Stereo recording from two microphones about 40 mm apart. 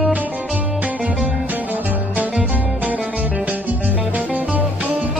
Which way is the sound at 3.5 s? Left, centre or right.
Right.